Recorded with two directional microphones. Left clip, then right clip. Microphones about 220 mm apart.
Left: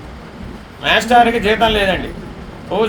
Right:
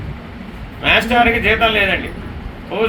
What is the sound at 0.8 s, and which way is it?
A man's voice, 15° left (ahead or behind).